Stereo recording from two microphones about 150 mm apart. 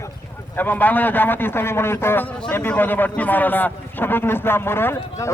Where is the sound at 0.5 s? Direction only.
10° left (ahead or behind).